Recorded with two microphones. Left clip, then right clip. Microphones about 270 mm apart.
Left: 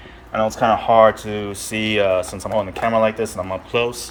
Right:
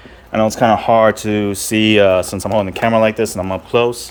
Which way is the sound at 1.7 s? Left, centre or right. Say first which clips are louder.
Right 8 dB; right.